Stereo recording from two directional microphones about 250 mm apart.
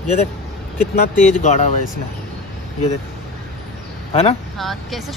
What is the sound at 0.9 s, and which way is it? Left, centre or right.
Speech, left.